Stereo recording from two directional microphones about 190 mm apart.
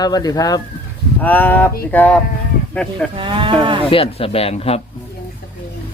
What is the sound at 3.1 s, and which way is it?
Speech, 25° right (ahead or behind).